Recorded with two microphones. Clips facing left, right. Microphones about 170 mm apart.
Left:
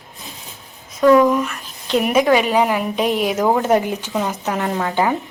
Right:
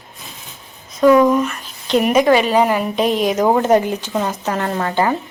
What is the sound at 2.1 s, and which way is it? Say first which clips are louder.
Speech: right 1 dB; 5° left (ahead or behind).